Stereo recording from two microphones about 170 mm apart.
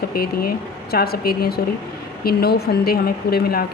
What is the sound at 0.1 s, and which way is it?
Speech, 65° left (ahead or behind).